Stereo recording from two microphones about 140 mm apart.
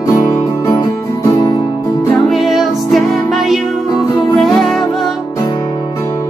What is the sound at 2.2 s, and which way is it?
Music, centre (ahead or behind).